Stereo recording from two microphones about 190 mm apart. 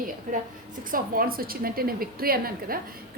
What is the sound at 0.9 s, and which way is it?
A woman's voice, 50° right (ahead or behind).